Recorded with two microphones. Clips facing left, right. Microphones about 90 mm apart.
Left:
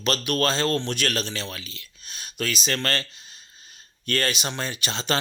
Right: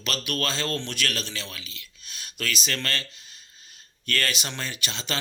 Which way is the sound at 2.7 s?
35° left (ahead or behind).